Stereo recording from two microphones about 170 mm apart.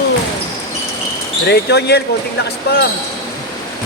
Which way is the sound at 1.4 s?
75° left (ahead or behind).